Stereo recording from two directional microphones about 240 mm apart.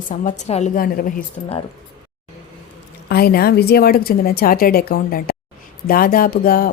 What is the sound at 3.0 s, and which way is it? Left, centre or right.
A woman's voice, left.